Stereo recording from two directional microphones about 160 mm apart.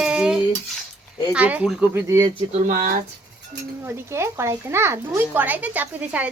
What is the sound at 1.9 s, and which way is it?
Speech, 15° right (ahead or behind).